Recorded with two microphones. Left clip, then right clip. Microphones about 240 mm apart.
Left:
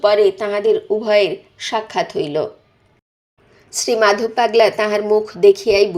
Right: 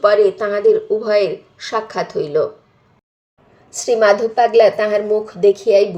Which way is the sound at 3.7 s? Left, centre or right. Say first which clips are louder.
Right 2 dB; left.